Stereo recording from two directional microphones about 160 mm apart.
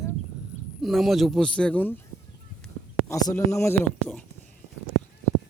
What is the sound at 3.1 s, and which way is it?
Speech, 20° left (ahead or behind).